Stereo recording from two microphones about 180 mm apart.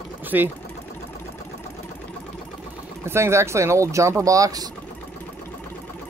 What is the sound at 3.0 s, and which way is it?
Speech, 15° right (ahead or behind).